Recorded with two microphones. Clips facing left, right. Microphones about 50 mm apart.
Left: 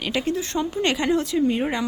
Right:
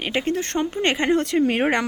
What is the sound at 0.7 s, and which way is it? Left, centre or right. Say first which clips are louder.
Speech: right 1 dB; right.